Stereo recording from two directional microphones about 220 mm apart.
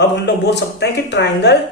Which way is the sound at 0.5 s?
50° left (ahead or behind).